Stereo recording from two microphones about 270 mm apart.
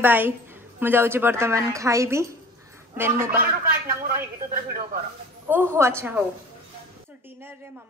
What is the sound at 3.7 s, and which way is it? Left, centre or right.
Speech, right.